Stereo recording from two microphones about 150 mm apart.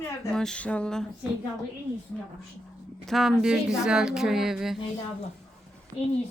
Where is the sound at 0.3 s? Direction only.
5° left (ahead or behind).